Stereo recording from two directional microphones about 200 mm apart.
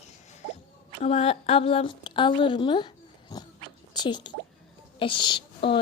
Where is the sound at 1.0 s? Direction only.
30° left (ahead or behind).